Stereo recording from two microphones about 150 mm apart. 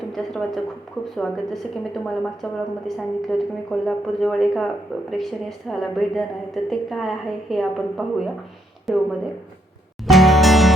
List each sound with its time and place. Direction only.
0.1 s a woman's voice: centre (ahead or behind)
10.1 s music: centre (ahead or behind)